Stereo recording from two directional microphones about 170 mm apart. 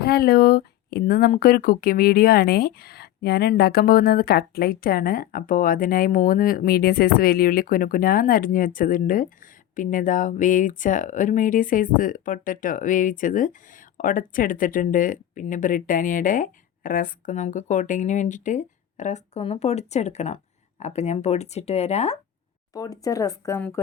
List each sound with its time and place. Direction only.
0.0 s speech: 65° left (ahead or behind); by 22.2 s 40° left (ahead or behind)
22.7 s speech: 20° left (ahead or behind)